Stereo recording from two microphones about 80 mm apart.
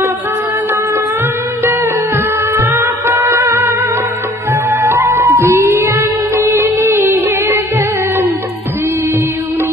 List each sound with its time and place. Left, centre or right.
1.6 s music: right